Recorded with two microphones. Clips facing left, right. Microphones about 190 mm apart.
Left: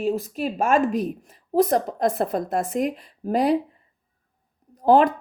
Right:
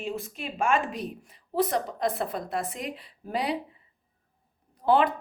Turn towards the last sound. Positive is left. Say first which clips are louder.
# left 6 dB
turn(degrees=45)  # may be behind; listen again after turning